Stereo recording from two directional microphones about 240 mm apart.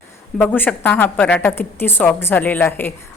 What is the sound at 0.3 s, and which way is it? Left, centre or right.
A woman's voice, centre.